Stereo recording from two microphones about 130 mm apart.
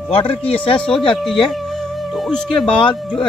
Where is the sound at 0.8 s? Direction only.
5° left (ahead or behind).